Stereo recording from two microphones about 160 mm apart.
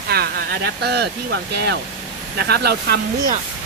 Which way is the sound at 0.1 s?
80° right.